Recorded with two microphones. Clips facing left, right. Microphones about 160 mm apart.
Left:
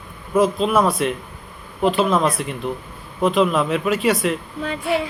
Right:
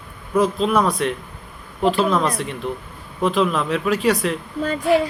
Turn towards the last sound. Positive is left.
turn(degrees=0)  # may be behind; listen again after turning